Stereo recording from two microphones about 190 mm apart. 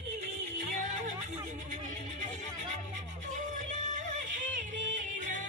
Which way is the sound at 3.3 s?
40° right (ahead or behind).